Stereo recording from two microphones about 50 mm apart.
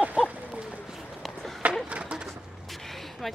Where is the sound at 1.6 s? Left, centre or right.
Right.